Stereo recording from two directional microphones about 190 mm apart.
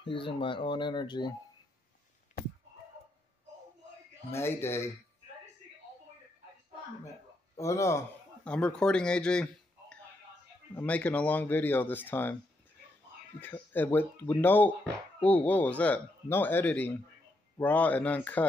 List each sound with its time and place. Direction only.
0.0 s speech: 25° left (ahead or behind)
4.3 s a man's voice: 10° left (ahead or behind)
7.5 s a man's voice: 15° left (ahead or behind)
13.4 s a man's voice: 10° left (ahead or behind)